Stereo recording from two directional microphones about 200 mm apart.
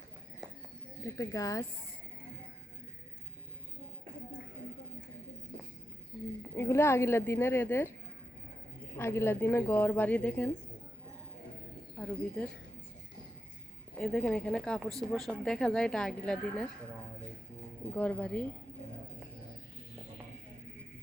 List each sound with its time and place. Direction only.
1.0 s a woman's voice: 15° left (ahead or behind)
6.6 s a woman's voice: 10° left (ahead or behind)
9.0 s a woman's voice: 10° left (ahead or behind)
14.0 s speech: 5° left (ahead or behind)
17.9 s a woman's voice: 5° left (ahead or behind)